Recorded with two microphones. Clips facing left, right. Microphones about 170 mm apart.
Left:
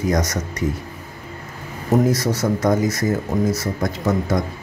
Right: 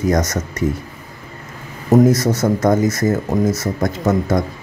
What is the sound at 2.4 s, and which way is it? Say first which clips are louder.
Speech: right 2 dB; 45° right (ahead or behind).